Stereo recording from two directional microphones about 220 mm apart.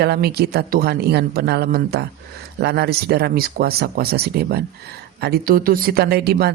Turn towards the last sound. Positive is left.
turn(degrees=-45)  # may be behind; listen again after turning